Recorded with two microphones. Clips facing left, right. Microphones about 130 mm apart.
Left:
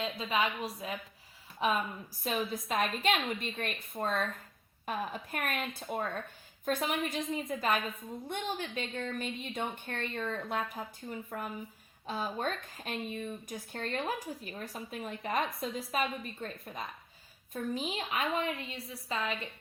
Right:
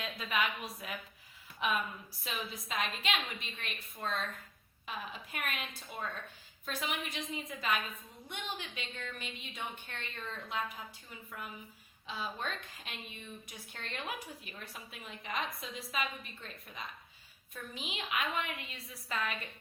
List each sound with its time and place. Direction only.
0.0 s a woman's voice: 30° left (ahead or behind)
2.5 s a woman's voice: 50° left (ahead or behind); by 19.5 s 25° left (ahead or behind)